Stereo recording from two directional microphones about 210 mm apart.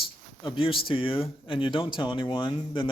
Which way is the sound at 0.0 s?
25° left (ahead or behind).